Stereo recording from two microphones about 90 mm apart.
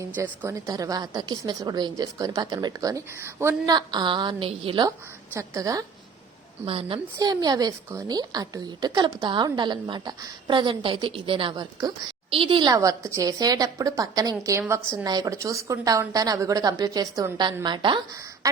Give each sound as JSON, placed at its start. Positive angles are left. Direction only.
{"t": 0.2, "sound": "a woman's voice", "side_deg": -35}
{"t": 2.9, "sound": "speech", "side_deg": -30}
{"t": 3.7, "sound": "a woman's voice", "side_deg": -55}
{"t": 5.3, "sound": "a woman's voice", "side_deg": -35}
{"t": 6.7, "sound": "a woman's voice", "side_deg": -75}
{"t": 7.2, "sound": "a woman's voice", "side_deg": -45}
{"t": 12.3, "sound": "a woman's voice", "side_deg": -80}
{"t": 12.6, "sound": "a woman's voice", "side_deg": -40}
{"t": 15.0, "sound": "a woman's voice", "side_deg": -45}
{"t": 17.3, "sound": "a woman's voice", "side_deg": -55}